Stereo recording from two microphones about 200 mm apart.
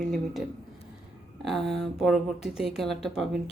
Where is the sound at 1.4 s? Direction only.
Centre (ahead or behind).